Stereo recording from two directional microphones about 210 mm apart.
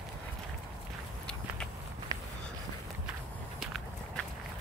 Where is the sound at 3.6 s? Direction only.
Centre (ahead or behind).